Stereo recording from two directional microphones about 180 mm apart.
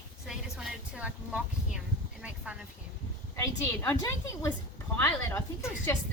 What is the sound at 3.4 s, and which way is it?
A woman's voice, 15° left (ahead or behind).